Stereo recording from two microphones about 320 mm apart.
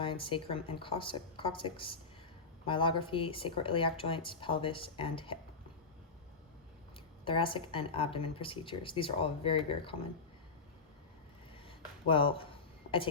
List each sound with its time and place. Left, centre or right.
0.0 s speech: centre
7.3 s speech: centre
12.0 s a sound: centre